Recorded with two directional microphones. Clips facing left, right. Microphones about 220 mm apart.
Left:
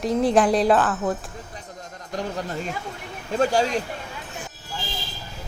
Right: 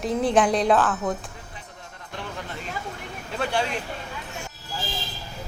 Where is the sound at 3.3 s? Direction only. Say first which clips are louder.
Left 6 dB; 40° left (ahead or behind).